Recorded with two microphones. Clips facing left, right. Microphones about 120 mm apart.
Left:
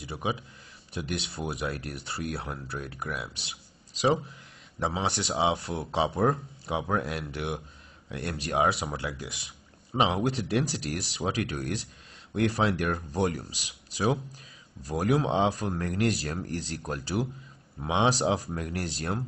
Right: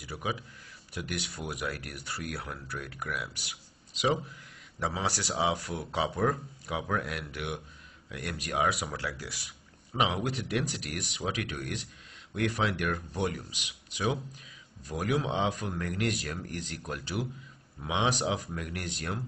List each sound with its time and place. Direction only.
0.0 s speech: 25° left (ahead or behind)
4.7 s speech: 25° left (ahead or behind)